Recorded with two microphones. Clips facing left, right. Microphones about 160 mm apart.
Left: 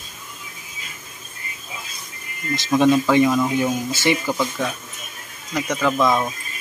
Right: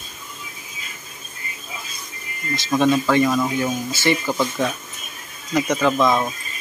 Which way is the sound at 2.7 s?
15° left (ahead or behind).